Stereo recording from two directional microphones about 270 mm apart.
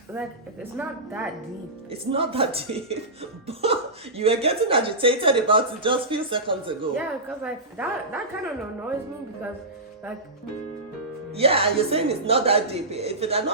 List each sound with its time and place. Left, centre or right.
0.8 s a woman's voice: centre
1.9 s speech: right
7.4 s a woman's voice: centre
11.3 s speech: right